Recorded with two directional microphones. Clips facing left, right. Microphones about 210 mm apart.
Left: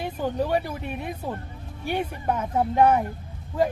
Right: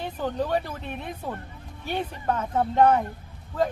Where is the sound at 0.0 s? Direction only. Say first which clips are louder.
Left 2 dB; 10° left (ahead or behind).